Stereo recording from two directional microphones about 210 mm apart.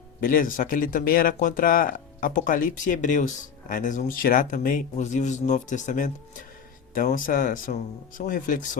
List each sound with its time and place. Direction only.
0.2 s speech: 40° left (ahead or behind)